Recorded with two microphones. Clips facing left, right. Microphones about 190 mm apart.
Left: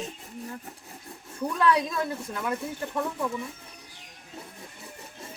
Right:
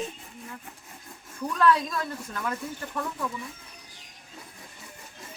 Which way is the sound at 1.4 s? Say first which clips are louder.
Right 1 dB; 20° left (ahead or behind).